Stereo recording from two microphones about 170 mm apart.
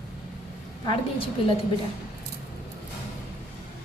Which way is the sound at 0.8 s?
30° left (ahead or behind).